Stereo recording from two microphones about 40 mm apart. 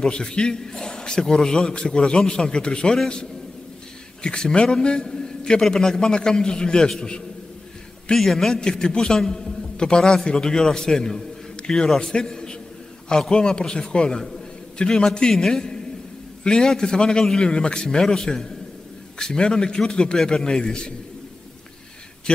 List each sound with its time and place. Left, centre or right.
0.0 s a man's voice: left
4.2 s a man's voice: left
8.2 s a man's voice: centre
8.5 s a man's voice: centre
12.0 s a man's voice: left